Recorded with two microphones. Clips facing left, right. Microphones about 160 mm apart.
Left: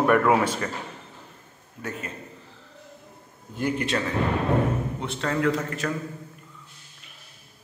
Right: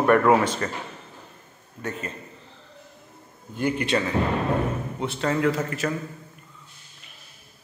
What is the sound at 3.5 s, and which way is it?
Speech, centre (ahead or behind).